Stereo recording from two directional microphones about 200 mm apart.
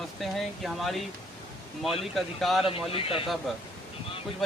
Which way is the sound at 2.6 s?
25° left (ahead or behind).